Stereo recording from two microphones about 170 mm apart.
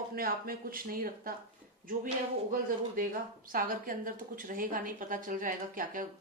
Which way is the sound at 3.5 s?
55° right (ahead or behind).